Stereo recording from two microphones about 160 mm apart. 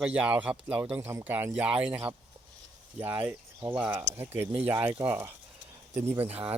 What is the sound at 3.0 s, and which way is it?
Speech, 10° right (ahead or behind).